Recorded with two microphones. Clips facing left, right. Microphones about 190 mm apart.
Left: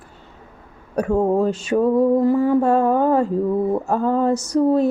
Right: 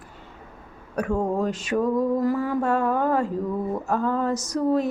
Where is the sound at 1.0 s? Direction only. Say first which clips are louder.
Left 6 dB; 35° left (ahead or behind).